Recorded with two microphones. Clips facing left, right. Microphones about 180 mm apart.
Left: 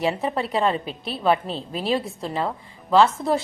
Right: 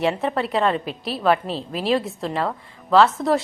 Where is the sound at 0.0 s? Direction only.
Centre (ahead or behind).